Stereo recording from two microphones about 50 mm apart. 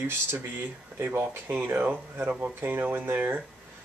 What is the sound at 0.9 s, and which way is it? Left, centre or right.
Speech, right.